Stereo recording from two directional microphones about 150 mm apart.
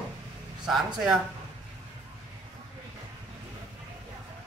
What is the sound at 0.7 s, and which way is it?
Speech, centre (ahead or behind).